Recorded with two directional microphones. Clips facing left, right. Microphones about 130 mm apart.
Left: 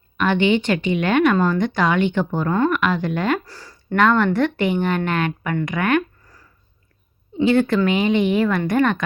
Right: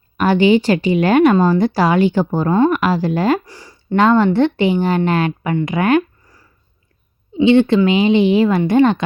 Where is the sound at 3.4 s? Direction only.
15° right (ahead or behind).